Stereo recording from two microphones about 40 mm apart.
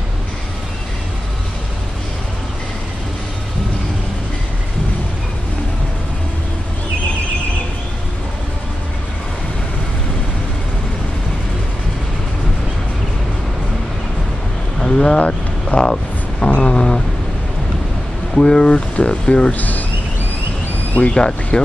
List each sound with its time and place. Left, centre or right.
14.8 s boat: centre
15.0 s vehicle: left
15.8 s a sound: left
18.3 s speech: centre
19.5 s speech: left
21.1 s speech: left